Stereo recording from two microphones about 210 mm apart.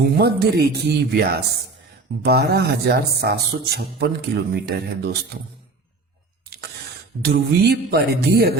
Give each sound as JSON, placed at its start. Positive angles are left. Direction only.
{"t": 0.0, "sound": "speech", "side_deg": -50}
{"t": 7.3, "sound": "speech", "side_deg": -50}